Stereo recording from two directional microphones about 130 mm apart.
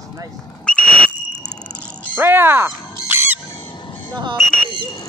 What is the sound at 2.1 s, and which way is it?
Dog, 15° right (ahead or behind).